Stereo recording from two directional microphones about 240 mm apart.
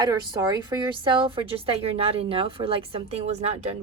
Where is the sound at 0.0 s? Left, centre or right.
Centre.